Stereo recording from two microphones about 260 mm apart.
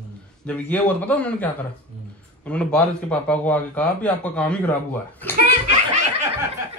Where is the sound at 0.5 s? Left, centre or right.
Centre.